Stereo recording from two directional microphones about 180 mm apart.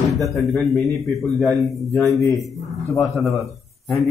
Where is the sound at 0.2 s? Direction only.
Centre (ahead or behind).